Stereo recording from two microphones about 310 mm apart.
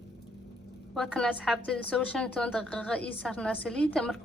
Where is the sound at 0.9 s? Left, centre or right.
Centre.